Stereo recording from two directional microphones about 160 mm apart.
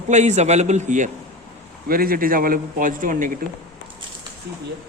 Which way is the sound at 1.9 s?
65° right (ahead or behind).